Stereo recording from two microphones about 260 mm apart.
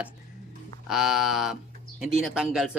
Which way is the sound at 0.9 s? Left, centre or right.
Centre.